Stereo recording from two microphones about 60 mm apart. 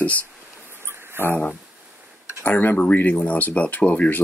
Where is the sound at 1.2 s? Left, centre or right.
Left.